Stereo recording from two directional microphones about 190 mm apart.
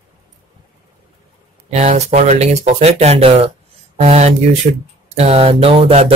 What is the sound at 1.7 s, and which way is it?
Speech, 35° right (ahead or behind).